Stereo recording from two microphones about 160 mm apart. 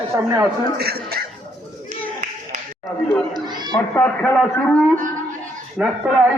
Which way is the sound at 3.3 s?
25° right (ahead or behind).